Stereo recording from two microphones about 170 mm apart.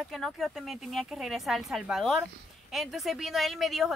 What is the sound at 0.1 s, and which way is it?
Speech, centre (ahead or behind).